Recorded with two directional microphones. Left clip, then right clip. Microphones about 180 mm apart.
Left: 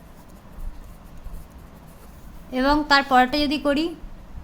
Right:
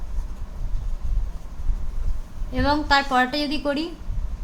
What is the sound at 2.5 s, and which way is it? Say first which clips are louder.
A woman's voice: left 2 dB; 20° left (ahead or behind).